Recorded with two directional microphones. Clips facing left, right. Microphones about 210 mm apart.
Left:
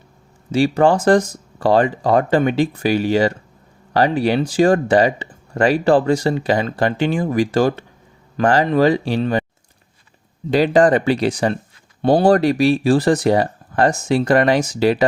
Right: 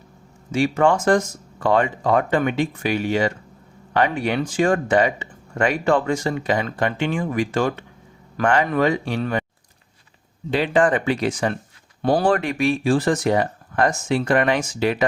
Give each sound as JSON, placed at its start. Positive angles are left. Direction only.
{"t": 0.5, "sound": "speech", "side_deg": 35}
{"t": 10.5, "sound": "speech", "side_deg": 40}